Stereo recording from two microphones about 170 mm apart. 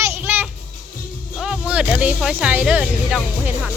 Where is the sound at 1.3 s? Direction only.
5° right (ahead or behind).